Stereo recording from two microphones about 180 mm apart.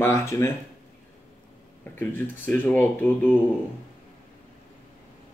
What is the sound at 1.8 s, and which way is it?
Speech, 10° left (ahead or behind).